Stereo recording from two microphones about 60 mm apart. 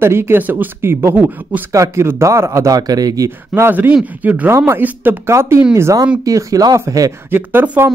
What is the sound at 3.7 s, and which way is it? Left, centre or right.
Speech, right.